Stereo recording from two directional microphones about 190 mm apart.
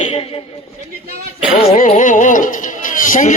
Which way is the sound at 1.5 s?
40° left (ahead or behind).